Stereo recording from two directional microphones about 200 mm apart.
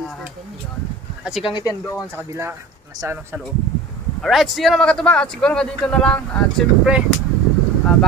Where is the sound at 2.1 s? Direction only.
10° right (ahead or behind).